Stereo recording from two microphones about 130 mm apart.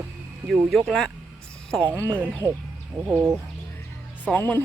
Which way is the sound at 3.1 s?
15° right (ahead or behind).